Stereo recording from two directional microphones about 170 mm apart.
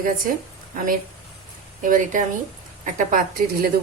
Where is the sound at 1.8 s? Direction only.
50° right (ahead or behind).